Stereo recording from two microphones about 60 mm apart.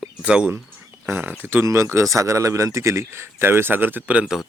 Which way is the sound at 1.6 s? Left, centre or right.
Right.